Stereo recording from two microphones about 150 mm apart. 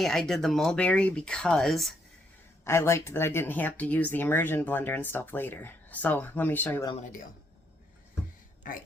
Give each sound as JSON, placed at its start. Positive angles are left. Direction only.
{"t": 0.0, "sound": "speech", "side_deg": 0}
{"t": 2.6, "sound": "speech", "side_deg": 15}